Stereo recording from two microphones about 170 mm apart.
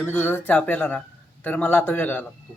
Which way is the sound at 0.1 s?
10° left (ahead or behind).